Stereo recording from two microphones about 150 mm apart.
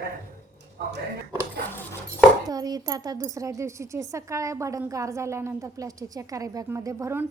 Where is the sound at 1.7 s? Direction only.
15° left (ahead or behind).